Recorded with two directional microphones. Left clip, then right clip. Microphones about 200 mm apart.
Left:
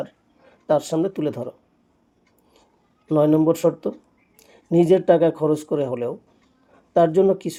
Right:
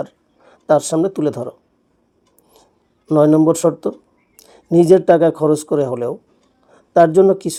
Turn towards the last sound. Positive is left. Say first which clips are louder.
# right 6 dB
turn(degrees=-20)  # may be behind; listen again after turning